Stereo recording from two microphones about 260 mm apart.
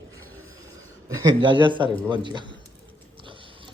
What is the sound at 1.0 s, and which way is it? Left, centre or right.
A man's voice, centre.